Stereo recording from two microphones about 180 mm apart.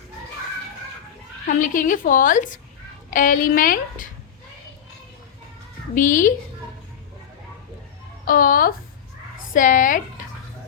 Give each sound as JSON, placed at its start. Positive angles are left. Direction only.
{"t": 1.5, "sound": "a woman's voice", "side_deg": 45}
{"t": 5.9, "sound": "a woman's voice", "side_deg": 45}
{"t": 8.2, "sound": "a woman's voice", "side_deg": 50}